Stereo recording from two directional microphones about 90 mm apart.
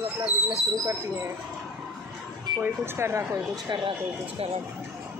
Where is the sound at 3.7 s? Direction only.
80° right.